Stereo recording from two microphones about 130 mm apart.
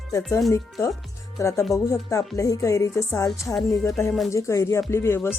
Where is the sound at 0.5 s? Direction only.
20° left (ahead or behind).